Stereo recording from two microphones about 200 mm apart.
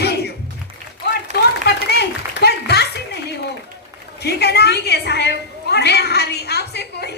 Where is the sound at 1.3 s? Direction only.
55° left (ahead or behind).